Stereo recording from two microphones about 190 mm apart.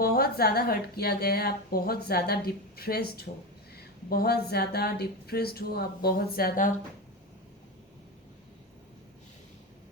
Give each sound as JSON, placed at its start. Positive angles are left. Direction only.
{"t": 0.0, "sound": "a woman's voice", "side_deg": 50}